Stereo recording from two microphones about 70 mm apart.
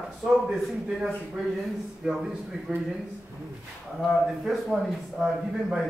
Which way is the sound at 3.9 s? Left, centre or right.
Centre.